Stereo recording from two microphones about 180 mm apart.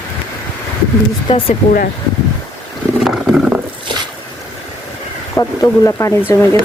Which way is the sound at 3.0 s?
5° right (ahead or behind).